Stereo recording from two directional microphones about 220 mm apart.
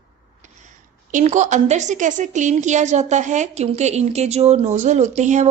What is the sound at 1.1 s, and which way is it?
A woman's voice, 35° right (ahead or behind).